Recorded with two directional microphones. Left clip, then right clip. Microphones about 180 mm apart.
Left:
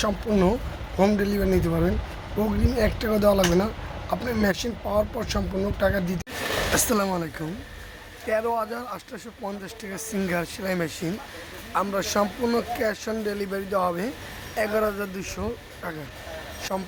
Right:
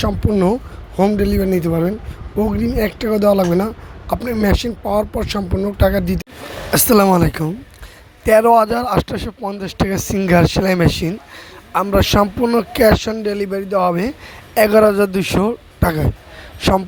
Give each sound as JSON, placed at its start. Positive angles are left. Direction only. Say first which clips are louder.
{"t": 0.0, "sound": "speech", "louder": "right 6 dB", "side_deg": -20}
{"t": 1.2, "sound": "speech", "louder": "right 7 dB", "side_deg": -35}
{"t": 12.7, "sound": "speech", "louder": "right 13 dB", "side_deg": -40}